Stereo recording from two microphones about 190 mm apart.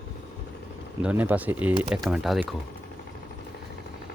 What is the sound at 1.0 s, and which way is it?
Speech, 10° right (ahead or behind).